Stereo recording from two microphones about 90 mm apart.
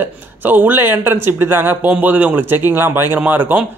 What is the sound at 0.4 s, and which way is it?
Speech, 20° right (ahead or behind).